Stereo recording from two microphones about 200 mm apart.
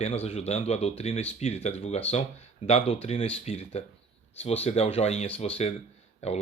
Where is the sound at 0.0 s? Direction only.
30° left (ahead or behind).